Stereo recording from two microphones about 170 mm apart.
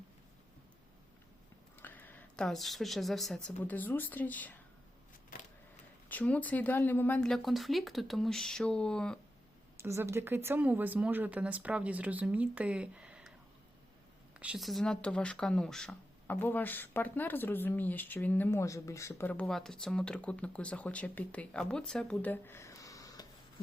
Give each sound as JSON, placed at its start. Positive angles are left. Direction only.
{"t": 1.8, "sound": "speech", "side_deg": 10}
{"t": 5.3, "sound": "a sound", "side_deg": 50}
{"t": 6.1, "sound": "speech", "side_deg": 10}
{"t": 9.7, "sound": "speech", "side_deg": -15}
{"t": 14.3, "sound": "speech", "side_deg": -5}